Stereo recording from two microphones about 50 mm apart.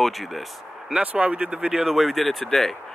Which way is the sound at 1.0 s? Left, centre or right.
Right.